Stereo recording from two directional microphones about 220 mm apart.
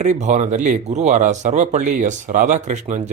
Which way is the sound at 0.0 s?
30° right (ahead or behind).